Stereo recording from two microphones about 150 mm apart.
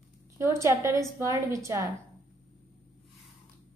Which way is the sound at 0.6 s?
20° right (ahead or behind).